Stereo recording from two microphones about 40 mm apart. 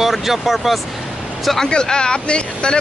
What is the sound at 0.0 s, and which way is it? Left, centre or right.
Speech, centre.